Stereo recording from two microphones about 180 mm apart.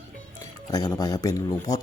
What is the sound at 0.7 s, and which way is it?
Speech, 20° left (ahead or behind).